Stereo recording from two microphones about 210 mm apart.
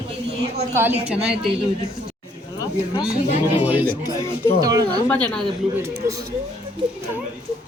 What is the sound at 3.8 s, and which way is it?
Speech, 10° left (ahead or behind).